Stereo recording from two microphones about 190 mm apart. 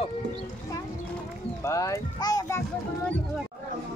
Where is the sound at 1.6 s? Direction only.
15° left (ahead or behind).